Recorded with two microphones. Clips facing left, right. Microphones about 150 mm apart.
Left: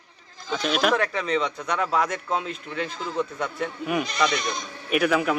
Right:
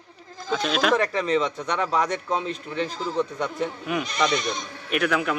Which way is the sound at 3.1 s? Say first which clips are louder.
Even; centre (ahead or behind).